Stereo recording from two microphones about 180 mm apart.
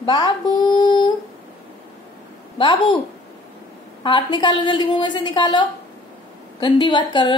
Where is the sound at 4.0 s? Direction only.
25° left (ahead or behind).